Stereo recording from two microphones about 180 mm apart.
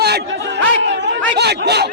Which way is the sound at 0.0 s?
65° right (ahead or behind).